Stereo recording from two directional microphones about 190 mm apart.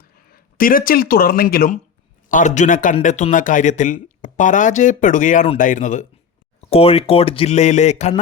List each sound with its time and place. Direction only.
0.0 s speech: 50° left (ahead or behind)
2.3 s a man's voice: 40° left (ahead or behind)